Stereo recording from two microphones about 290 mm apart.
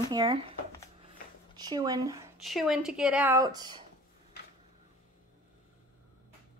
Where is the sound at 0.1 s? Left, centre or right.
Centre.